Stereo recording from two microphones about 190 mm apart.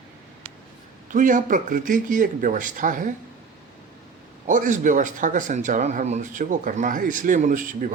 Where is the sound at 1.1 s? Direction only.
45° right (ahead or behind).